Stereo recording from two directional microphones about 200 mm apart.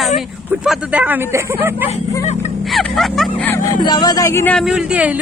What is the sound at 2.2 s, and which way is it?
Speech, 35° left (ahead or behind).